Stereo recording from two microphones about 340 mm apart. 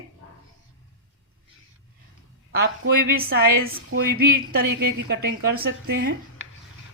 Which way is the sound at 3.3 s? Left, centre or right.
Right.